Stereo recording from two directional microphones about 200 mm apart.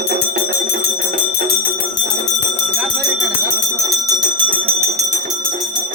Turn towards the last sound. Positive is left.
turn(degrees=-30)  # may be behind; listen again after turning